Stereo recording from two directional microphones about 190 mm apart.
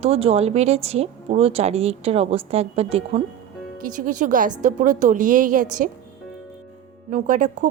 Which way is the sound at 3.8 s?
45° right (ahead or behind).